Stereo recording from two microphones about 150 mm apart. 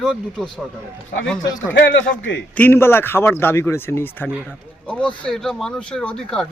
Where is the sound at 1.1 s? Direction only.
90° left.